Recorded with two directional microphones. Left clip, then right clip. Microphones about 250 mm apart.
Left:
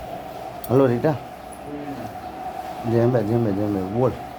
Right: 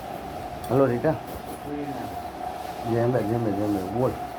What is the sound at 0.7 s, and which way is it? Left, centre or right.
Speech, left.